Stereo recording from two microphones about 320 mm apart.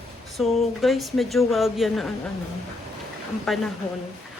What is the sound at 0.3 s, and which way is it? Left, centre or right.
Speech, centre.